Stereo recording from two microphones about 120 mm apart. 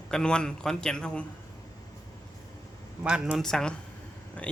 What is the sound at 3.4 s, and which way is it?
Speech, 5° left (ahead or behind).